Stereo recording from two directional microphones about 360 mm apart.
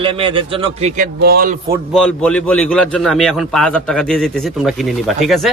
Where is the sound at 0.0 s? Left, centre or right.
Centre.